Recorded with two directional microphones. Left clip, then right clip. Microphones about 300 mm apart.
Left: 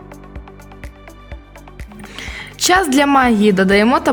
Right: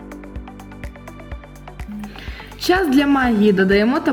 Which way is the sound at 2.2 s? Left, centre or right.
Left.